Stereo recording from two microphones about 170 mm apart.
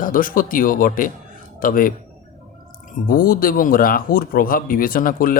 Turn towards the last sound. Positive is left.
turn(degrees=55)  # may be behind; listen again after turning